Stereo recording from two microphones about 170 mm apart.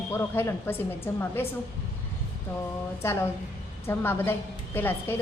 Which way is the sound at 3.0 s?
15° left (ahead or behind).